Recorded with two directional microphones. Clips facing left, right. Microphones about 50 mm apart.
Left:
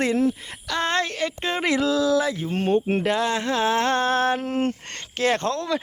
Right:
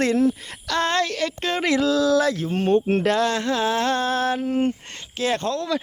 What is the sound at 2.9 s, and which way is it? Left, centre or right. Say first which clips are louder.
Speech: right 2 dB; centre.